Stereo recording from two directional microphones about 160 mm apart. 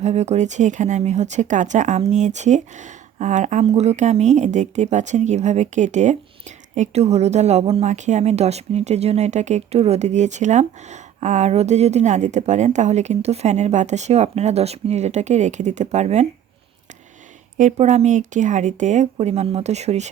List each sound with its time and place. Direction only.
0.0 s a woman's voice: 45° right (ahead or behind)
17.6 s a woman's voice: 45° right (ahead or behind)